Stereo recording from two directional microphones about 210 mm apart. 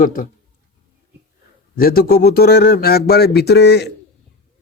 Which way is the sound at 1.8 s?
45° left (ahead or behind).